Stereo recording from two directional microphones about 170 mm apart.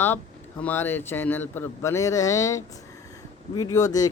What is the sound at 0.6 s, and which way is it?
A man's voice, 10° left (ahead or behind).